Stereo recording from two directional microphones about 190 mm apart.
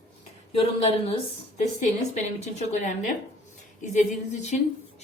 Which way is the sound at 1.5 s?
35° left (ahead or behind).